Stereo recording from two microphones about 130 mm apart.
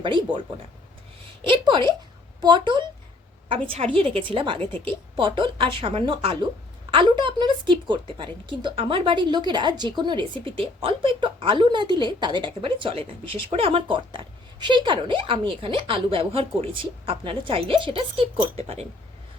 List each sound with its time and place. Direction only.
1.5 s speech: 40° right (ahead or behind)
3.9 s speech: 40° right (ahead or behind)